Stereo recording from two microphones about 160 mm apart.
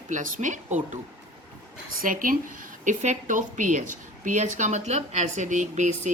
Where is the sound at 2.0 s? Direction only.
60° right (ahead or behind).